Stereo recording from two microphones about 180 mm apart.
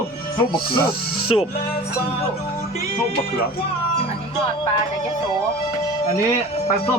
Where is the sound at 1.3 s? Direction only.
30° left (ahead or behind).